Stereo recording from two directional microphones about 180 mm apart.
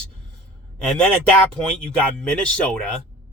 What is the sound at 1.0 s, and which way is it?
Speech, 5° left (ahead or behind).